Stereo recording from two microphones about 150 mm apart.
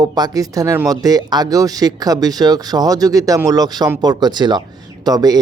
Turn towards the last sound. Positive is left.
turn(degrees=-25)  # may be behind; listen again after turning